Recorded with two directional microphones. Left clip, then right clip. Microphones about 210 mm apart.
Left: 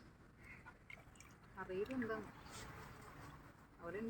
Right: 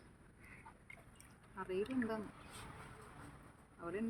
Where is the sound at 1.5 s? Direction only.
50° right (ahead or behind).